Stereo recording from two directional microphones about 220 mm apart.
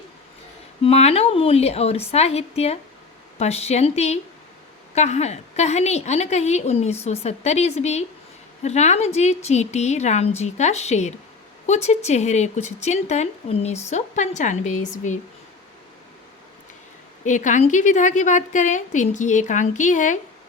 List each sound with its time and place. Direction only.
0.8 s a woman's voice: 30° left (ahead or behind)
17.2 s a woman's voice: 35° left (ahead or behind)